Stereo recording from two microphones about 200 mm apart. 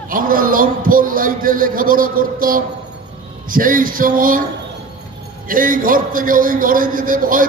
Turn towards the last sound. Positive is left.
turn(degrees=-45)  # may be behind; listen again after turning